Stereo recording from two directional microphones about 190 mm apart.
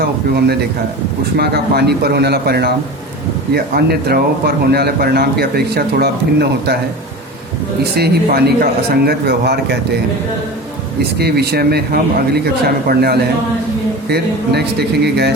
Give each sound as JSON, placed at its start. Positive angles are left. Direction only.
{"t": 0.0, "sound": "speech", "side_deg": -55}
{"t": 7.9, "sound": "speech", "side_deg": -55}
{"t": 11.0, "sound": "speech", "side_deg": -55}